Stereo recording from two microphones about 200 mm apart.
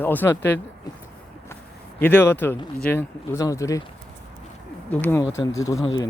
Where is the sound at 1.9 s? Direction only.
10° left (ahead or behind).